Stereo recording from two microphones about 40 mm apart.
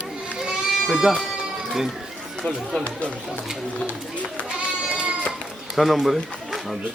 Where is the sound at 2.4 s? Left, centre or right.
Left.